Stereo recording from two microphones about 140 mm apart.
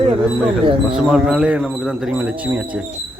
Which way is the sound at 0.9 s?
5° right (ahead or behind).